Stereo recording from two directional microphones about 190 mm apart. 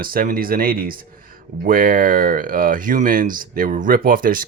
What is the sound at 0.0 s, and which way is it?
Speech, 50° right (ahead or behind).